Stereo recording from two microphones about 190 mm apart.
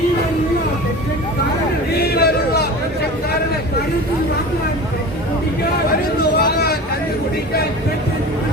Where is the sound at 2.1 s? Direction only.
55° left (ahead or behind).